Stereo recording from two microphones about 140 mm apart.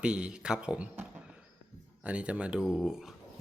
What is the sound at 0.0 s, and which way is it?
Speech, 5° right (ahead or behind).